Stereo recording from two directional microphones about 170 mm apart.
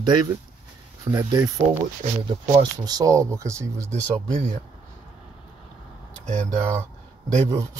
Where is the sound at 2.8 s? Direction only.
20° right (ahead or behind).